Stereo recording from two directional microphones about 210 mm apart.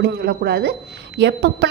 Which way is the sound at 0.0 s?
50° right (ahead or behind).